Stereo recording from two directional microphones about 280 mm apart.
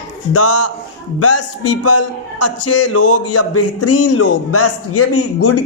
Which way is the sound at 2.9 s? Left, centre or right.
Left.